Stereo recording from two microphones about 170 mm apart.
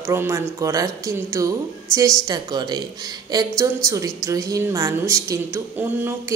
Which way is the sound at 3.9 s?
20° right (ahead or behind).